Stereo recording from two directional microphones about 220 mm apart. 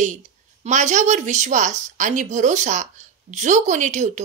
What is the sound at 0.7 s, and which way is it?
A woman's voice, 35° right (ahead or behind).